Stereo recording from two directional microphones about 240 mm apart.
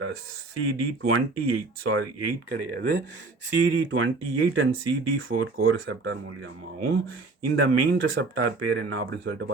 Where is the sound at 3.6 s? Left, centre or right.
Right.